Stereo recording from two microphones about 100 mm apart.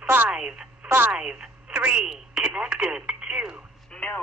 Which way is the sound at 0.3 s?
10° right (ahead or behind).